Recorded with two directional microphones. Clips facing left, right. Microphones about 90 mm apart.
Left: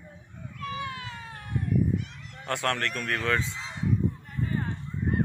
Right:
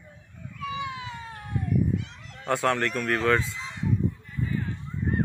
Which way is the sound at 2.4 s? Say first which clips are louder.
Right 4 dB; 5° right (ahead or behind).